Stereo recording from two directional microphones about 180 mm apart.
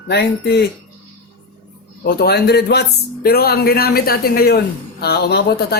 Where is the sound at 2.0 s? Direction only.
60° left (ahead or behind).